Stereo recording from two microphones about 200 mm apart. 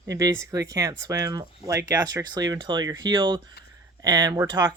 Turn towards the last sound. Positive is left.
turn(degrees=-15)  # may be behind; listen again after turning